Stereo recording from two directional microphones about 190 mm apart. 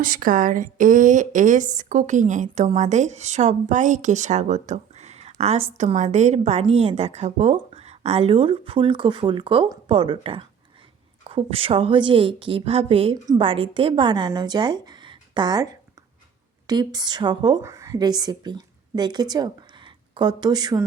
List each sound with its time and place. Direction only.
0.0 s a woman's voice: 45° right (ahead or behind); by 20.8 s 20° right (ahead or behind)